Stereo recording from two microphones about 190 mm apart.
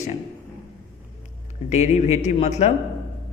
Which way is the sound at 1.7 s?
40° left (ahead or behind).